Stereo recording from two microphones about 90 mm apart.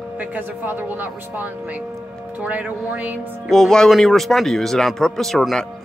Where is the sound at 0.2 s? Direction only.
20° right (ahead or behind).